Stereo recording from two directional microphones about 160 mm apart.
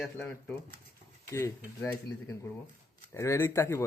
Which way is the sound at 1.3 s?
20° left (ahead or behind).